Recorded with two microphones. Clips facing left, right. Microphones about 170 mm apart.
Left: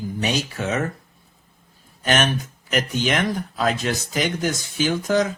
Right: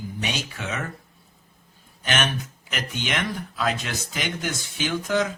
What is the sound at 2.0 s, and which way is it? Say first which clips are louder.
Speech: left 5 dB; 40° left (ahead or behind).